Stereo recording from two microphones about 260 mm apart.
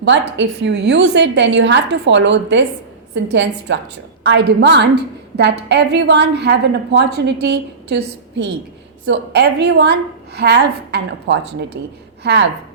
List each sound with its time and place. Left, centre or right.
0.0 s a woman's voice: right